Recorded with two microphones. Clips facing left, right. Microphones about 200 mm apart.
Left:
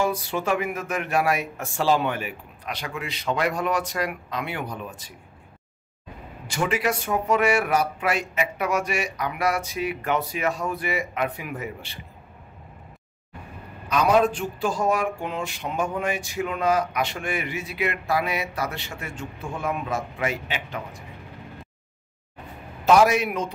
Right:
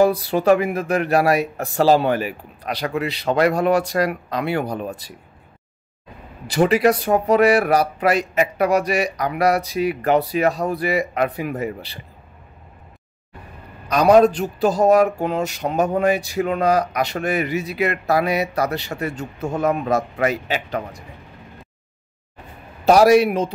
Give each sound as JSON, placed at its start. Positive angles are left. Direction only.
{"t": 0.0, "sound": "speech", "side_deg": -35}
{"t": 6.4, "sound": "speech", "side_deg": -35}
{"t": 13.8, "sound": "speech", "side_deg": -40}
{"t": 22.8, "sound": "speech", "side_deg": -35}